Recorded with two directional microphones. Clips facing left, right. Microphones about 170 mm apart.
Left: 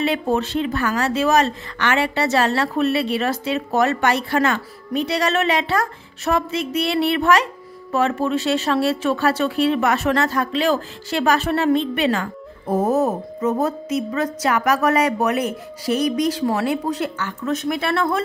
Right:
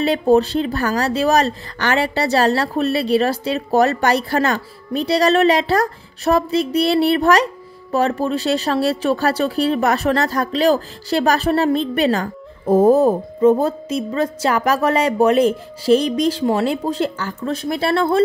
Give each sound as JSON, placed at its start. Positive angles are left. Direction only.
{"t": 0.0, "sound": "a woman's voice", "side_deg": -35}